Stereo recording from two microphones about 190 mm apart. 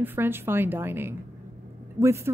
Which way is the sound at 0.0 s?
10° right (ahead or behind).